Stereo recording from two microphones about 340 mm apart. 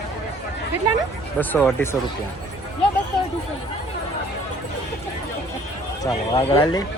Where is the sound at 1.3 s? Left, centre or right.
Centre.